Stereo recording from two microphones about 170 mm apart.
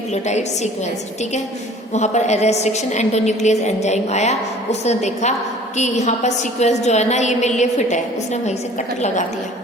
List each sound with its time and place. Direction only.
0.1 s a woman's voice: 40° left (ahead or behind)
1.9 s a woman's voice: 40° left (ahead or behind)